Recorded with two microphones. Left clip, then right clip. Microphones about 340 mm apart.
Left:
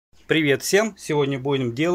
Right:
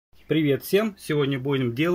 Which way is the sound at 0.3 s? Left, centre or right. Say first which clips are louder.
Left 3 dB; left.